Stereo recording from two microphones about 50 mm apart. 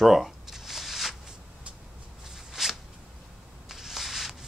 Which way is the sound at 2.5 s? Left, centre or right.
Centre.